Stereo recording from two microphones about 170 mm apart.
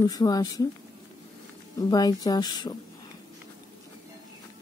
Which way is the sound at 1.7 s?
20° left (ahead or behind).